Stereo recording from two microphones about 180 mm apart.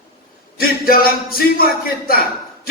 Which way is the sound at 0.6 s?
55° left (ahead or behind).